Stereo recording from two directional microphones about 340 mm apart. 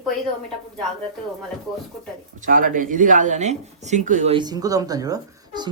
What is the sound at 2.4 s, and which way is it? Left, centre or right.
Speech, right.